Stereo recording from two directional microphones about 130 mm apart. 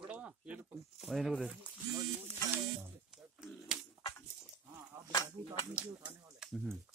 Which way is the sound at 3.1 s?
5° right (ahead or behind).